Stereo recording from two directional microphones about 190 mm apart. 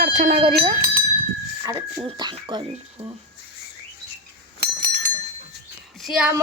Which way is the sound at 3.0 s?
10° right (ahead or behind).